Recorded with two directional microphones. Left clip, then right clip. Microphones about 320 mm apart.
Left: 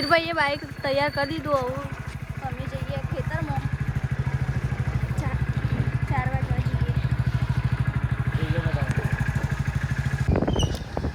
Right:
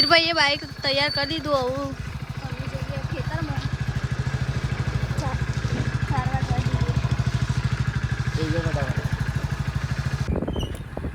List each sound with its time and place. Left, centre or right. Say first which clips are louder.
0.0 s speech: right 4 dB; centre